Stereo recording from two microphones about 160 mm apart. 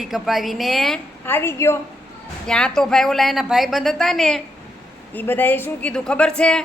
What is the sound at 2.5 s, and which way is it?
A woman's voice, 5° left (ahead or behind).